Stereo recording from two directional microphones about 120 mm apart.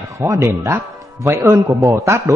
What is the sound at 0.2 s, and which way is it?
A man's voice, 20° right (ahead or behind).